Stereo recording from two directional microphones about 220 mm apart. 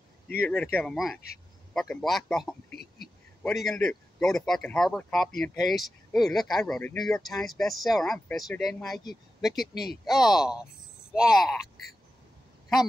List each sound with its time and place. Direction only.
0.5 s speech: 5° left (ahead or behind)
2.7 s speech: 45° left (ahead or behind)
3.4 s speech: centre (ahead or behind)